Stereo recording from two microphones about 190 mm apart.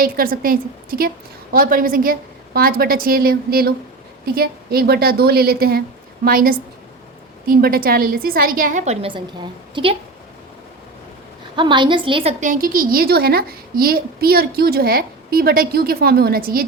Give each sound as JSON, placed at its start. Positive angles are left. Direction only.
{"t": 0.0, "sound": "a woman's voice", "side_deg": -50}
{"t": 11.5, "sound": "a woman's voice", "side_deg": -25}
{"t": 12.4, "sound": "a woman's voice", "side_deg": -45}